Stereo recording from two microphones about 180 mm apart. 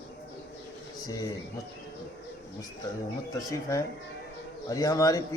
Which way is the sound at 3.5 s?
20° left (ahead or behind).